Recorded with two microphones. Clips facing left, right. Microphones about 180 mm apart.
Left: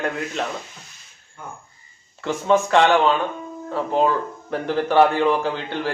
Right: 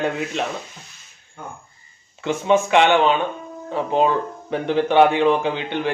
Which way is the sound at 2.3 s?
20° right (ahead or behind).